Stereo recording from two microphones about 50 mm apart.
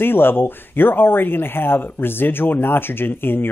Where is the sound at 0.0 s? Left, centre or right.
Left.